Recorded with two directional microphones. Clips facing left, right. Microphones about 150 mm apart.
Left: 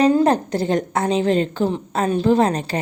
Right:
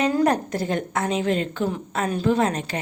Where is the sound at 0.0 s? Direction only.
25° left (ahead or behind).